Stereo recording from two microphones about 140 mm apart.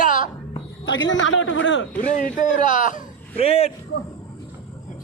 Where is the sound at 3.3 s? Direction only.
45° left (ahead or behind).